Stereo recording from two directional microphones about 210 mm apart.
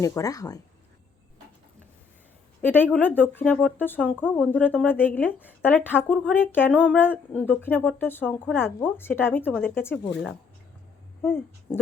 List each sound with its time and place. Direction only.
0.0 s a woman's voice: 15° left (ahead or behind)
2.6 s a woman's voice: 10° left (ahead or behind)
11.2 s speech: 10° left (ahead or behind)